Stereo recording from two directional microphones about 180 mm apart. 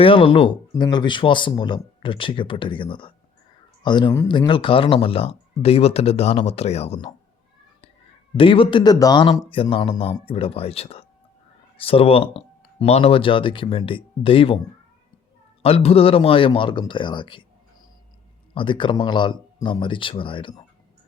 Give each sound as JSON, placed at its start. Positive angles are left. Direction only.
{"t": 0.0, "sound": "speech", "side_deg": 30}
{"t": 8.4, "sound": "speech", "side_deg": 30}
{"t": 15.6, "sound": "speech", "side_deg": 35}
{"t": 18.5, "sound": "speech", "side_deg": 30}